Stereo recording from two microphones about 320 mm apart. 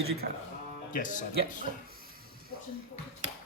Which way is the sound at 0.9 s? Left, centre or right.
Left.